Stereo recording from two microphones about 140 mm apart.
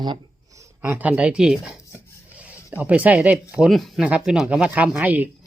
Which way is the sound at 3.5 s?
5° right (ahead or behind).